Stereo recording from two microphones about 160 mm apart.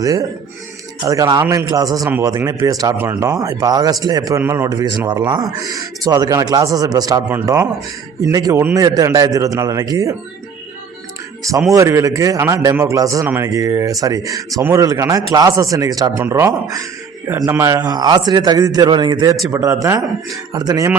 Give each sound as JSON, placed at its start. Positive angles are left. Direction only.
{"t": 0.0, "sound": "speech", "side_deg": -20}
{"t": 11.7, "sound": "speech", "side_deg": -20}